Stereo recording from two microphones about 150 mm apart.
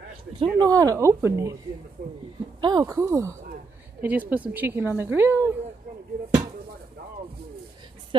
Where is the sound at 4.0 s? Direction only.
10° right (ahead or behind).